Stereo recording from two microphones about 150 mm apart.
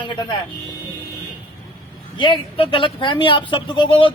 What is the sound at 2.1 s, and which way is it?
A man's voice, 35° left (ahead or behind).